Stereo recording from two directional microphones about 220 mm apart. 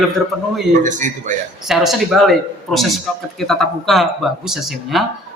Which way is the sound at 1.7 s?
Centre (ahead or behind).